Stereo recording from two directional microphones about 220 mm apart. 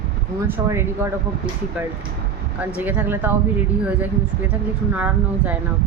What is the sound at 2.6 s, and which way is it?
Speech, 5° right (ahead or behind).